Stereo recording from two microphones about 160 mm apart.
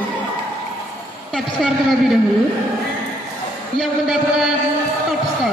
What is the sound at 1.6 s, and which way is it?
Speech, centre (ahead or behind).